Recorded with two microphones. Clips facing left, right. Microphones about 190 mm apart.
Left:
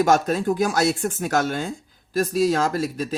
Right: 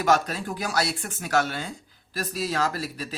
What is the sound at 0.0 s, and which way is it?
Speech, 45° left (ahead or behind).